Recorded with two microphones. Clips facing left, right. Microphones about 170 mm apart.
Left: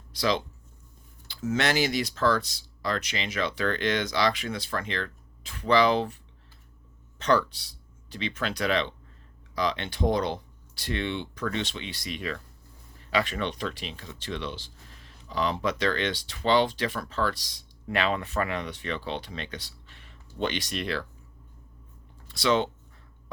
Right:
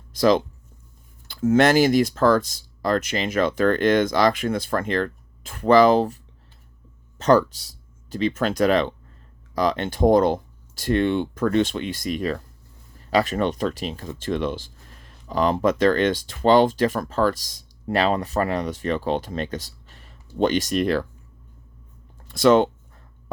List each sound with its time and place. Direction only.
0.1 s speech: 45° right (ahead or behind)
7.2 s speech: 45° right (ahead or behind)
22.3 s speech: 50° right (ahead or behind)